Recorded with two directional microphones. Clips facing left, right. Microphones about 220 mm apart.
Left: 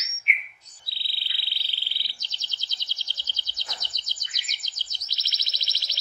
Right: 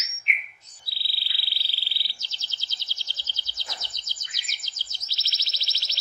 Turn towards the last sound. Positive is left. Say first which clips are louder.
# even
turn(degrees=15)  # may be behind; listen again after turning